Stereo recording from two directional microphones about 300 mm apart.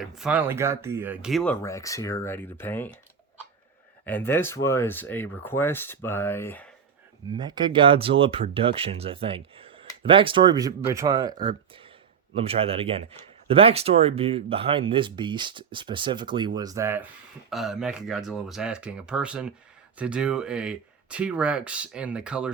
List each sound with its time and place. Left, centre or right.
0.0 s speech: centre
4.0 s speech: centre
7.3 s a man's voice: centre